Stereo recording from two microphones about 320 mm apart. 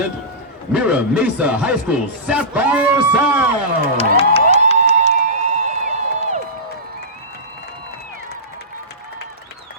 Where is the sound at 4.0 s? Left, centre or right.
Centre.